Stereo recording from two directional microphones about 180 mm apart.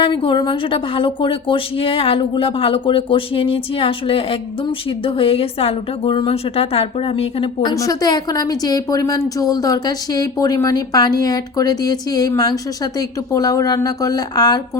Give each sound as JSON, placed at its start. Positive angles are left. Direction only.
{"t": 0.0, "sound": "speech", "side_deg": 25}
{"t": 7.7, "sound": "a woman's voice", "side_deg": 20}